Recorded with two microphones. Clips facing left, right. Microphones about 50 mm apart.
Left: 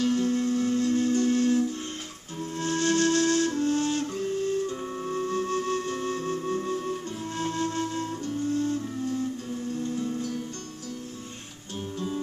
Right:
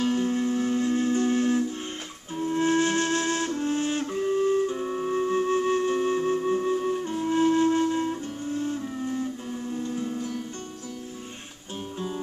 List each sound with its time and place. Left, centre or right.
0.0 s music: right
2.3 s flute: right